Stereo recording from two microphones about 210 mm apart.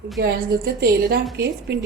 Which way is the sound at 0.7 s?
45° right (ahead or behind).